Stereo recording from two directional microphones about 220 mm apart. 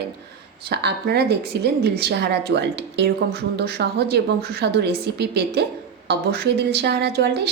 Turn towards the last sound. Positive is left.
turn(degrees=-50)  # may be behind; listen again after turning